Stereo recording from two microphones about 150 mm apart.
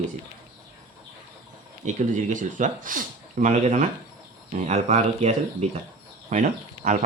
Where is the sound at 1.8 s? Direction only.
55° right (ahead or behind).